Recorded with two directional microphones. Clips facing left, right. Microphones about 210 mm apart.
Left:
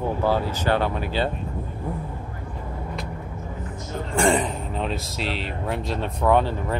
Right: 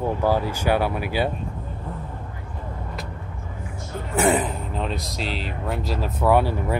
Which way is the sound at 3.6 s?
5° right (ahead or behind).